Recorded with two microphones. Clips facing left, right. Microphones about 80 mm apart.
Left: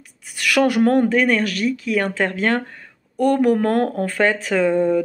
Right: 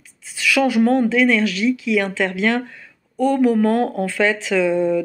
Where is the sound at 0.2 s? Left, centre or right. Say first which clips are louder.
Left 1 dB; left.